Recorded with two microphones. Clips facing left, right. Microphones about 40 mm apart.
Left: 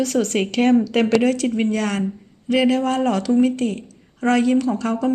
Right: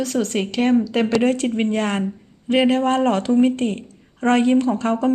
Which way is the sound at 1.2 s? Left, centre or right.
Right.